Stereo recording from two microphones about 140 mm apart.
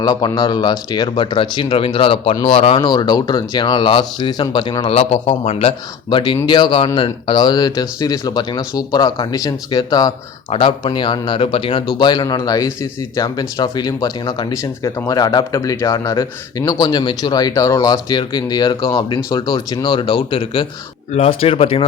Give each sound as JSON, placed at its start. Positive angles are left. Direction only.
{"t": 0.0, "sound": "speech", "side_deg": 30}
{"t": 4.9, "sound": "speech", "side_deg": 45}
{"t": 10.5, "sound": "a man's voice", "side_deg": 40}
{"t": 21.1, "sound": "speech", "side_deg": 50}